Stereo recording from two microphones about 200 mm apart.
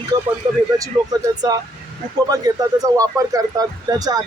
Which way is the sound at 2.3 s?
20° right (ahead or behind).